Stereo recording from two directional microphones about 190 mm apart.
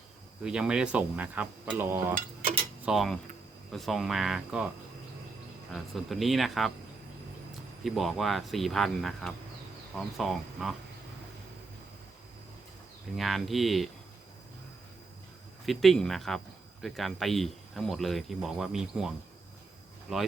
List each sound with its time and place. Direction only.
0.4 s speech: 5° right (ahead or behind)
2.8 s speech: centre (ahead or behind)
5.7 s speech: centre (ahead or behind)
7.9 s speech: centre (ahead or behind)
13.1 s speech: centre (ahead or behind)
15.6 s speech: centre (ahead or behind)